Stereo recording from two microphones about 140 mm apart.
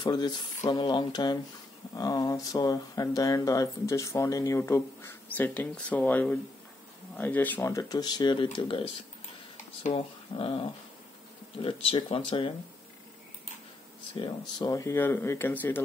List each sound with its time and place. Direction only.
0.0 s speech: 30° left (ahead or behind); by 7.6 s 10° left (ahead or behind)
7.6 s speech: 25° left (ahead or behind)
9.9 s speech: 40° left (ahead or behind)
14.6 s speech: 25° left (ahead or behind)